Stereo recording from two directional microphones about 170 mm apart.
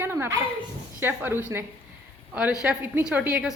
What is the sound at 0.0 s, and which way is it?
Dog, 15° right (ahead or behind).